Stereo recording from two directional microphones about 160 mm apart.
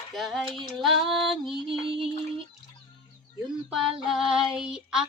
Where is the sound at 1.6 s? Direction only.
35° right (ahead or behind).